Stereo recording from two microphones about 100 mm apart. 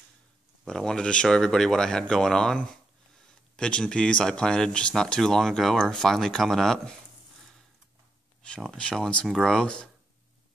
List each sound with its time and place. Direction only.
0.7 s speech: 5° left (ahead or behind)
8.4 s speech: 5° left (ahead or behind)